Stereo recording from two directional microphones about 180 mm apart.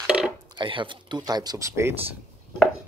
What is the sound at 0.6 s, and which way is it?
Speech, 25° right (ahead or behind).